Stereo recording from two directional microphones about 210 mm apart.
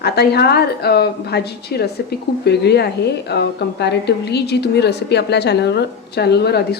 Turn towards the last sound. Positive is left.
turn(degrees=50)  # may be behind; listen again after turning